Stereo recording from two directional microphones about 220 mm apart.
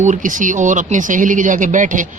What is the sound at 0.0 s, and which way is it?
Speech, 35° right (ahead or behind).